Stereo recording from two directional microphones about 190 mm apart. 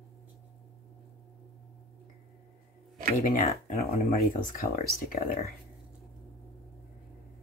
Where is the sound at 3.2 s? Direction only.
45° left (ahead or behind).